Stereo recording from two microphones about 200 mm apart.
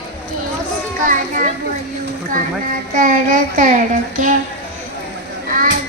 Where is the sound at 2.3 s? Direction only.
40° right (ahead or behind).